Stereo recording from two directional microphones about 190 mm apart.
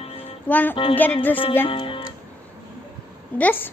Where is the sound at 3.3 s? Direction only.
10° left (ahead or behind).